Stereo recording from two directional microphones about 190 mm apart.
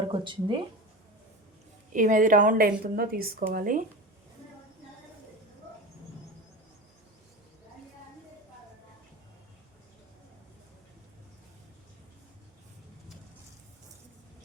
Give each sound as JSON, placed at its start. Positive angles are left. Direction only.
{"t": 0.1, "sound": "speech", "side_deg": -25}
{"t": 1.9, "sound": "a woman's voice", "side_deg": -45}